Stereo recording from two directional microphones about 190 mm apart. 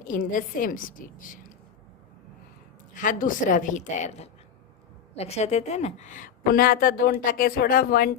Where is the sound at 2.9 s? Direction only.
45° left (ahead or behind).